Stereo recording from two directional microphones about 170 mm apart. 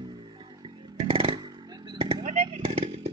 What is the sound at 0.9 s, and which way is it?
Chainsaw, 35° right (ahead or behind).